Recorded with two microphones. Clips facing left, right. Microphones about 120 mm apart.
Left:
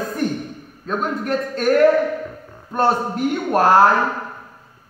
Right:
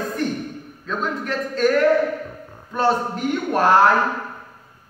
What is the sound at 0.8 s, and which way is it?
Speech, 45° left (ahead or behind).